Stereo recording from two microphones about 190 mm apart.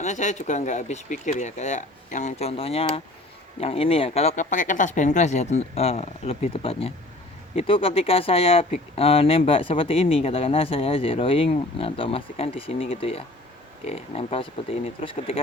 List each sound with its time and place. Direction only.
0.0 s speech: 40° left (ahead or behind)